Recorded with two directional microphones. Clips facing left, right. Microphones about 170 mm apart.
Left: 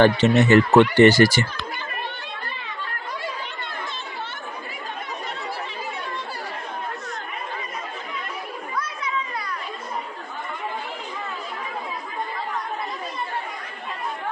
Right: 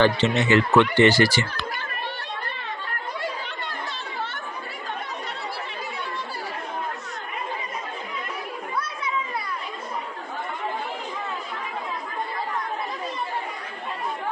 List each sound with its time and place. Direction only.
0.0 s speech: 45° left (ahead or behind)